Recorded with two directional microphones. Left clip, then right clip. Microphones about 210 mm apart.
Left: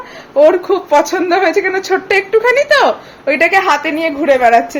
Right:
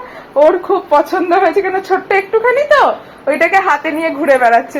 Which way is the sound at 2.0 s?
30° left (ahead or behind).